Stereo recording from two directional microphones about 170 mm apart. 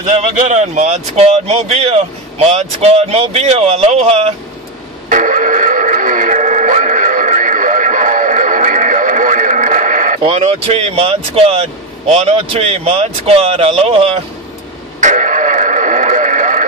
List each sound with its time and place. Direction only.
0.0 s speech: 40° right (ahead or behind)
5.1 s music: 50° right (ahead or behind)
10.2 s speech: 35° right (ahead or behind)
15.0 s radio: 45° right (ahead or behind)